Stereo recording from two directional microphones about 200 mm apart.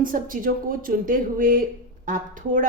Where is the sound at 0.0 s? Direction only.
45° right (ahead or behind).